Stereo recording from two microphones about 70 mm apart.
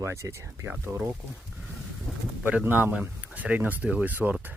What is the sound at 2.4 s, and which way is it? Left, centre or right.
Speech, right.